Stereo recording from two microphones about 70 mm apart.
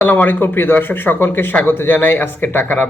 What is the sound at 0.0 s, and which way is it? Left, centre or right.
Speech, left.